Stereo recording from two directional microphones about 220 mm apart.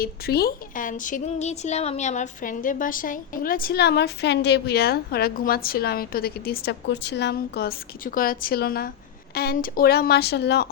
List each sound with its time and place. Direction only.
0.0 s speech: 45° left (ahead or behind)